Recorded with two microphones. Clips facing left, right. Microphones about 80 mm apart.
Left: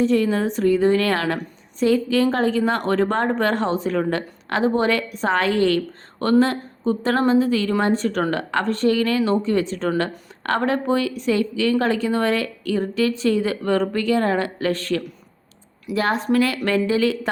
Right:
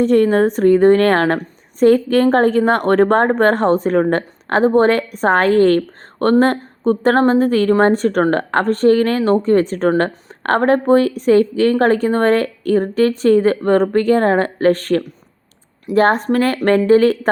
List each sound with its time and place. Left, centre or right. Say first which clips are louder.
0.0 s a woman's voice: right 6 dB; right